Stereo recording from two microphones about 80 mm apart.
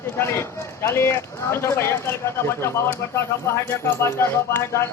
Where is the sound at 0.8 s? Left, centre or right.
Left.